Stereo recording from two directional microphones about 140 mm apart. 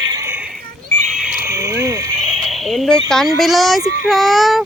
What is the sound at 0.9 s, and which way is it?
Neigh, 5° left (ahead or behind).